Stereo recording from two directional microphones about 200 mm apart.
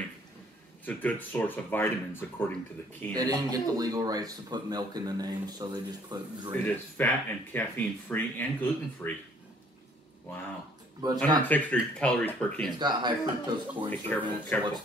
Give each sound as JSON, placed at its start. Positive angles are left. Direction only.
{"t": 0.8, "sound": "speech", "side_deg": 10}
{"t": 3.2, "sound": "a man's voice", "side_deg": -20}
{"t": 6.5, "sound": "speech", "side_deg": 10}
{"t": 11.4, "sound": "speech", "side_deg": 10}
{"t": 12.7, "sound": "a man's voice", "side_deg": -20}
{"t": 13.8, "sound": "speech", "side_deg": 10}